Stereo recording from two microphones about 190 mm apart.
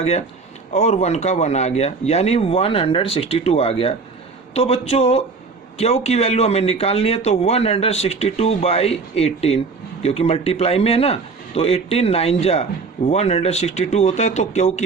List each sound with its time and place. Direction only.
0.0 s speech: 35° left (ahead or behind)